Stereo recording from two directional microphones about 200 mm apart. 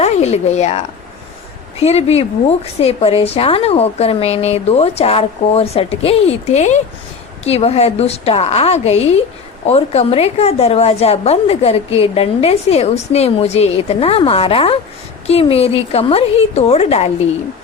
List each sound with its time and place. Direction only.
0.0 s speech: 35° left (ahead or behind)
1.8 s a woman's voice: 30° left (ahead or behind)